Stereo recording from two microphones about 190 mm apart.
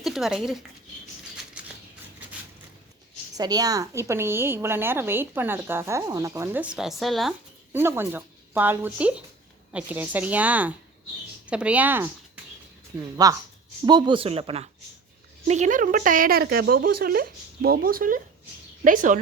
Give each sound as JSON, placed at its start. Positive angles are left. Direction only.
{"t": 0.0, "sound": "speech", "side_deg": 0}
{"t": 1.6, "sound": "a sound", "side_deg": -5}
{"t": 3.3, "sound": "a woman's voice", "side_deg": -20}
{"t": 7.7, "sound": "a woman's voice", "side_deg": -10}
{"t": 13.2, "sound": "speech", "side_deg": -20}